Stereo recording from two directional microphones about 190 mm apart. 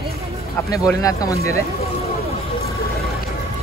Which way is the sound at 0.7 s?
20° left (ahead or behind).